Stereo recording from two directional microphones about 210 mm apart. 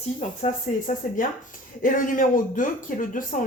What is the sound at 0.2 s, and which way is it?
Speech, 35° left (ahead or behind).